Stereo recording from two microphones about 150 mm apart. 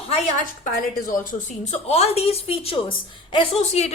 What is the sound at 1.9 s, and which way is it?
A woman's voice, 45° left (ahead or behind).